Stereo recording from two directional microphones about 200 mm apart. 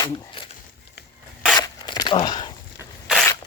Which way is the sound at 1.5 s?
20° left (ahead or behind).